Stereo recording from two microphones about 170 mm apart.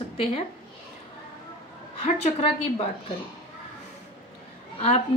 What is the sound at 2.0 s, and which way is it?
Speech, 40° left (ahead or behind).